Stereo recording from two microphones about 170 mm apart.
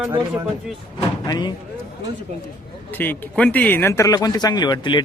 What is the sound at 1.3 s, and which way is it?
Speech, 25° left (ahead or behind).